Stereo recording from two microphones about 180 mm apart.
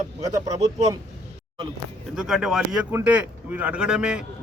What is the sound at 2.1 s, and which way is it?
Speech, 5° right (ahead or behind).